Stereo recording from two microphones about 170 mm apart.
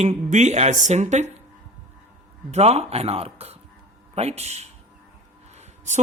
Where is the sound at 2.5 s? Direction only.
40° right (ahead or behind).